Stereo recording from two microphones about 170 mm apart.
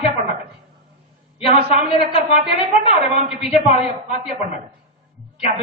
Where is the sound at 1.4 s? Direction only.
35° left (ahead or behind).